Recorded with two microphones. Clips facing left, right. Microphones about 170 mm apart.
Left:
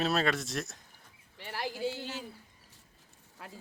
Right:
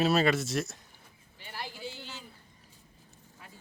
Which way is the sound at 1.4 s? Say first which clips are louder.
Left 6 dB; 70° left (ahead or behind).